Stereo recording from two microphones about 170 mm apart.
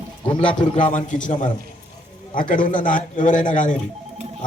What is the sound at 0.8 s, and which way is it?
Speech, 50° left (ahead or behind).